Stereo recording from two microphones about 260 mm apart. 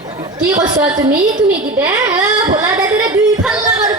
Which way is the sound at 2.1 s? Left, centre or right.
Centre.